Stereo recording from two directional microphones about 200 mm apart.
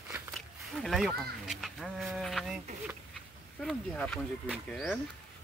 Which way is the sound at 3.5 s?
5° left (ahead or behind).